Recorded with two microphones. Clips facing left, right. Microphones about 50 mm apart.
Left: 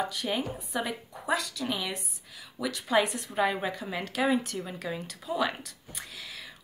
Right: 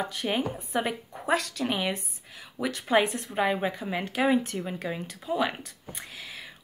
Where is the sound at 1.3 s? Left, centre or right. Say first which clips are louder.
Right 3 dB; right.